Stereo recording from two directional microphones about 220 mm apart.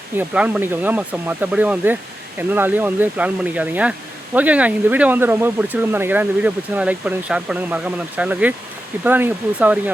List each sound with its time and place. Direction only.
0.2 s speech: 5° right (ahead or behind)